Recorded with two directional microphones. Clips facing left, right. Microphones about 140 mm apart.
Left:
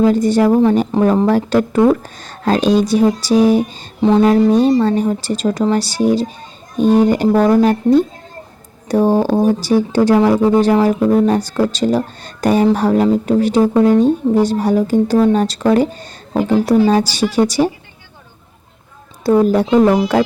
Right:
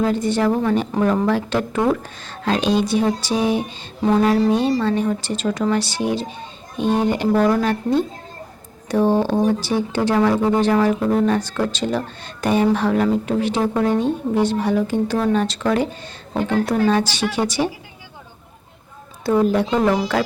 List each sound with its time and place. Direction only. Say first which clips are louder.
0.1 s a woman's voice: left 6 dB; 40° left (ahead or behind)
4.0 s mantra: left 5 dB; 25° left (ahead or behind)
4.3 s a woman's voice: left 6 dB; 40° left (ahead or behind)
16.4 s speech: left 5 dB; 5° left (ahead or behind)
16.8 s a woman's voice: left 4 dB; 40° left (ahead or behind)
19.2 s a woman's voice: left 5 dB; 40° left (ahead or behind)